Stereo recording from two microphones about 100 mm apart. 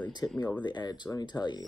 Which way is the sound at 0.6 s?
45° left (ahead or behind).